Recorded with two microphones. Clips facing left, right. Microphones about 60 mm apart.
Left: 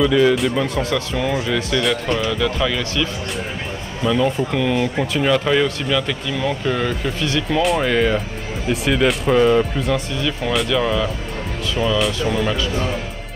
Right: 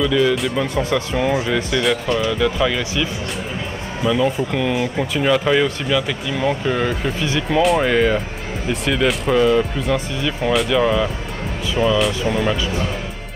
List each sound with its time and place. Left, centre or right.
0.0 s speech: centre
0.8 s speech: centre
10.7 s speech: centre